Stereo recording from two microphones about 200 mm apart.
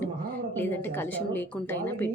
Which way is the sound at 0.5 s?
10° left (ahead or behind).